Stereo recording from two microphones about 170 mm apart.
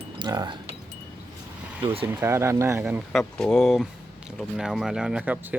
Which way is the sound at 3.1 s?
5° left (ahead or behind).